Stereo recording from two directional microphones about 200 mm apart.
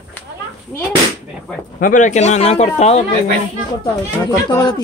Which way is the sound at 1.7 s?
40° left (ahead or behind).